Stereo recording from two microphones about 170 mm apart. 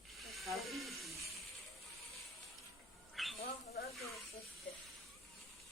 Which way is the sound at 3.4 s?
65° left (ahead or behind).